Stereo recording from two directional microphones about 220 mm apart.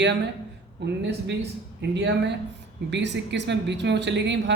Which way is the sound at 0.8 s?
50° right (ahead or behind).